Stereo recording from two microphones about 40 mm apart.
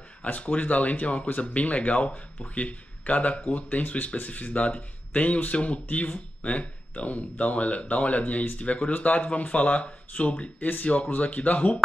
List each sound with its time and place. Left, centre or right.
0.2 s speech: left